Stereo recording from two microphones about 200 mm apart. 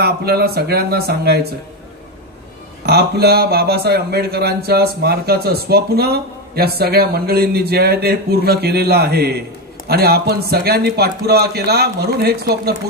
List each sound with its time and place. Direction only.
0.0 s speech: 50° right (ahead or behind)
2.8 s speech: 50° right (ahead or behind)